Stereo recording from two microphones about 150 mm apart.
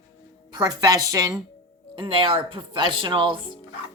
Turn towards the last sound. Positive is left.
turn(degrees=-35)  # may be behind; listen again after turning